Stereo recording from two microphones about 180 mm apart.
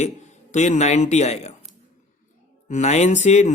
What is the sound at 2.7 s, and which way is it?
Speech, 40° left (ahead or behind).